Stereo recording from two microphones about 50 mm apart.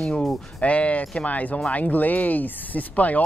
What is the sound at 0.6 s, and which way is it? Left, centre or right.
Speech, left.